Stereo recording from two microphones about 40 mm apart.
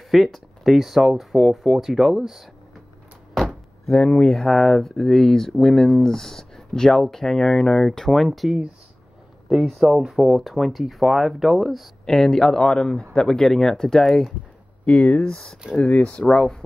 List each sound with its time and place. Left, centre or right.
0.1 s speech: centre
3.3 s speech: centre
9.8 s speech: centre
14.9 s speech: centre
15.9 s speech: left